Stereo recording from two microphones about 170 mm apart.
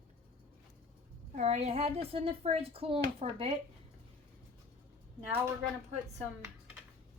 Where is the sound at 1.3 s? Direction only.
40° right (ahead or behind).